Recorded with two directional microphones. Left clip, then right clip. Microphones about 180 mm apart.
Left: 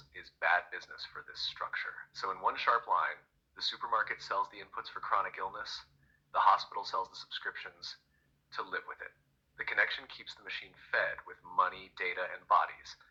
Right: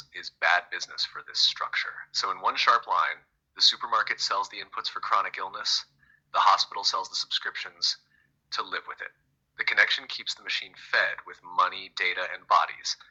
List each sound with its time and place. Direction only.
0.1 s a man's voice: 25° right (ahead or behind)